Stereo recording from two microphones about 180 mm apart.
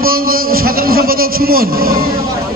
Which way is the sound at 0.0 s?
55° right (ahead or behind).